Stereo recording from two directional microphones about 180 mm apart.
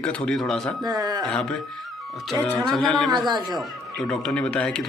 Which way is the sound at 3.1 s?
25° right (ahead or behind).